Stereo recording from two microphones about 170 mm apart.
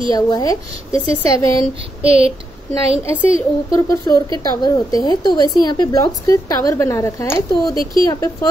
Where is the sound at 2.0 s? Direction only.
35° right (ahead or behind).